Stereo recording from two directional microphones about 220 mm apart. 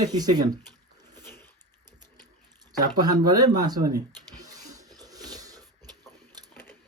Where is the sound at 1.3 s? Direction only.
10° left (ahead or behind).